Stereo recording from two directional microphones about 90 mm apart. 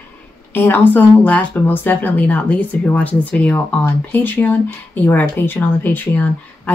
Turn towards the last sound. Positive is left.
turn(degrees=20)  # may be behind; listen again after turning